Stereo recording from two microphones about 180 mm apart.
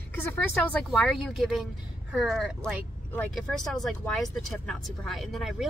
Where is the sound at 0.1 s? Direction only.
10° left (ahead or behind).